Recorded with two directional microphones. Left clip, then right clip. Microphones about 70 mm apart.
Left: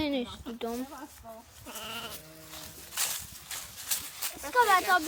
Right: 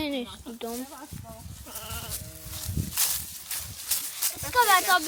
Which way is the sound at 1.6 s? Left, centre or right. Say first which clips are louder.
Left 1 dB; left.